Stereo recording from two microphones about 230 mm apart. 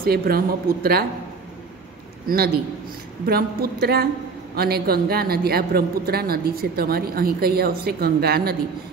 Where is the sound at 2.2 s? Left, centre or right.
Right.